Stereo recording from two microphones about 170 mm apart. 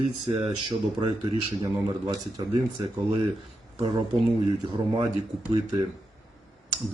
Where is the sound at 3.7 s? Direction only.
25° right (ahead or behind).